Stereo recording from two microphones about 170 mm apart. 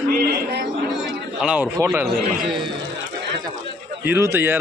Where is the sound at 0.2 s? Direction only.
65° right (ahead or behind).